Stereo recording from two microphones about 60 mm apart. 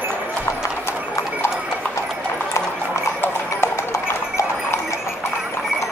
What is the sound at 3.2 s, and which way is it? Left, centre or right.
Clip-clop, left.